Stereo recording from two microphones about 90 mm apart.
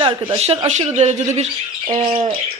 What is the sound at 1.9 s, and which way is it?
Bird, 90° right.